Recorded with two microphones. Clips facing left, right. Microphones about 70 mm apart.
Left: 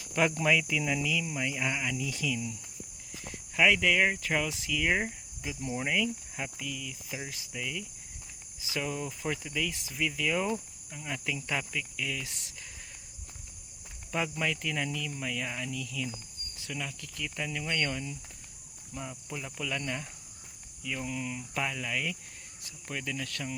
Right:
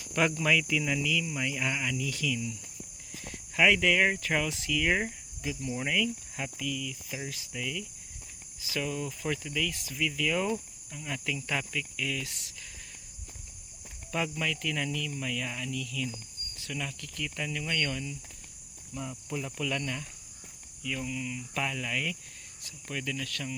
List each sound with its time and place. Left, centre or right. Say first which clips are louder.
0.1 s speech: even; centre
2.0 s speech: right 1 dB; centre
3.5 s speech: right 1 dB; centre
6.6 s speech: right 4 dB; left
7.3 s speech: right 1 dB; centre
8.7 s speech: right 1 dB; left
12.2 s speech: right 1 dB; left
14.1 s speech: even; left
16.6 s cricket: right 1 dB; centre
16.8 s speech: right 2 dB; centre
17.6 s speech: even; centre
19.3 s speech: right 3 dB; centre
21.0 s speech: left 2 dB; left
21.5 s speech: right 1 dB; centre; by 23.6 s left